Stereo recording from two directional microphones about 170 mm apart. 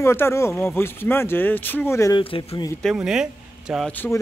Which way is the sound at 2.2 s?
30° left (ahead or behind).